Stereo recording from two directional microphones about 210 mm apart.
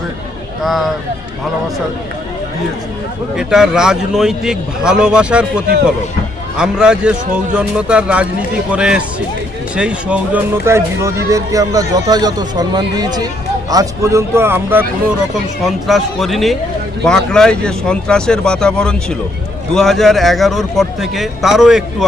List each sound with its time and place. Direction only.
0.6 s a man's voice: centre (ahead or behind)
3.3 s a man's voice: centre (ahead or behind)